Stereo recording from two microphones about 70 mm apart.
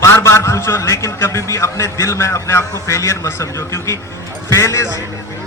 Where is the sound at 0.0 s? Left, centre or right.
Left.